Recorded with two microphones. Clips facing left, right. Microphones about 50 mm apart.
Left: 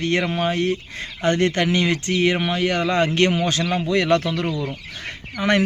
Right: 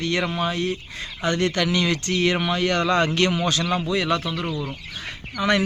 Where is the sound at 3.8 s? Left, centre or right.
Left.